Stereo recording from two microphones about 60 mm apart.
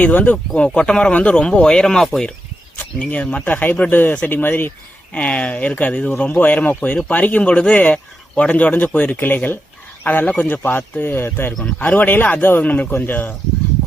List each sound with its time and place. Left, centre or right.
0.0 s speech: left
0.5 s speech: centre
2.7 s speech: left
5.1 s speech: left